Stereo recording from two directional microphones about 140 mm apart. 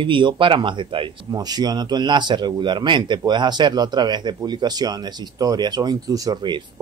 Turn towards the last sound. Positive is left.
turn(degrees=-25)  # may be behind; listen again after turning